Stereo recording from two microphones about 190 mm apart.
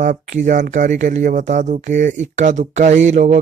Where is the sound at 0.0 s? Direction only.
45° right (ahead or behind).